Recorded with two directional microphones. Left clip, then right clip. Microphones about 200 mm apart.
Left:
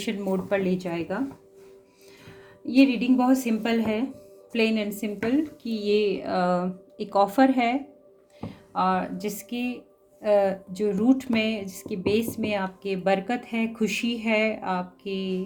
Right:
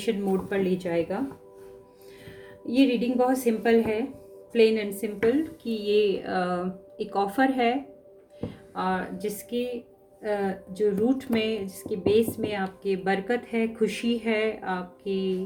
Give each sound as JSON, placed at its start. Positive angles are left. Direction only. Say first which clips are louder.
{"t": 0.0, "sound": "speech", "louder": "right 2 dB", "side_deg": 50}
{"t": 2.8, "sound": "speech", "louder": "even", "side_deg": 50}